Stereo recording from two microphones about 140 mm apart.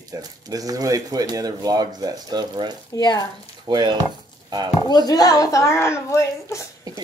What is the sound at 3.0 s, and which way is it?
Speech, 30° left (ahead or behind).